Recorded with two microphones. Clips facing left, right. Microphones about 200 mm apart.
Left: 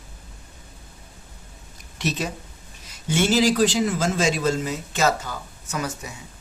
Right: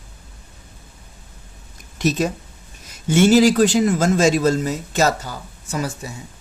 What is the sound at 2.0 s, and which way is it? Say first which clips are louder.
Speech: right 7 dB; 45° right (ahead or behind).